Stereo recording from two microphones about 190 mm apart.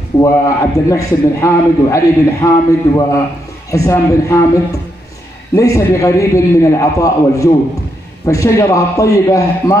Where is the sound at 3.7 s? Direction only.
15° left (ahead or behind).